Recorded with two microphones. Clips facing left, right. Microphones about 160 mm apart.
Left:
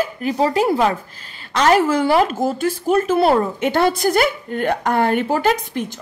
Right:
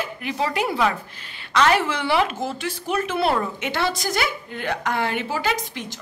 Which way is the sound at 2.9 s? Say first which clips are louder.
Left 6 dB; 40° left (ahead or behind).